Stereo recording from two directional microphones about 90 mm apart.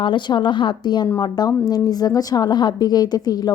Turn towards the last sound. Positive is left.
turn(degrees=50)  # may be behind; listen again after turning